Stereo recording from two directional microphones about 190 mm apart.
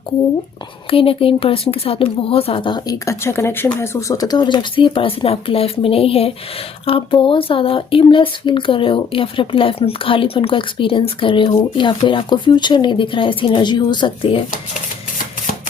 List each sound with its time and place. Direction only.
0.9 s speech: 30° left (ahead or behind)